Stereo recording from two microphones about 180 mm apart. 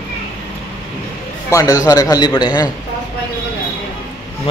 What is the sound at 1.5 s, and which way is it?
A man's voice, 20° left (ahead or behind).